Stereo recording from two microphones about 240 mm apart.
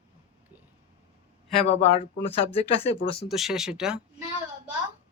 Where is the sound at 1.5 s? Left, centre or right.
Left.